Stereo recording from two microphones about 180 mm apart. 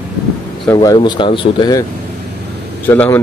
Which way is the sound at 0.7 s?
25° left (ahead or behind).